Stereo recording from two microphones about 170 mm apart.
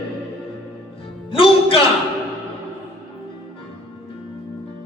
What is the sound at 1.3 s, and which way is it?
Music, 30° left (ahead or behind).